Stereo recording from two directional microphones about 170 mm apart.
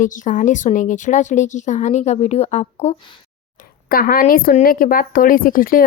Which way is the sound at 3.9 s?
60° left (ahead or behind).